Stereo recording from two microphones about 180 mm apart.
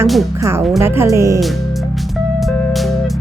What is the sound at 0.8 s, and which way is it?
Speech, 15° right (ahead or behind).